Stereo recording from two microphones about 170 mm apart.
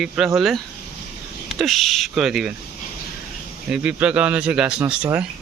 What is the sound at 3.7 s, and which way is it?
Speech, 5° right (ahead or behind).